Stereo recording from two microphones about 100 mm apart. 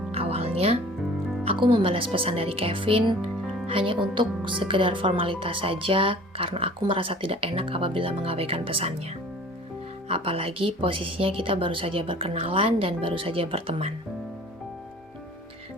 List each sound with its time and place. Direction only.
0.1 s music: 80° right
1.5 s speech: 55° right (ahead or behind)
10.1 s speech: 65° right (ahead or behind)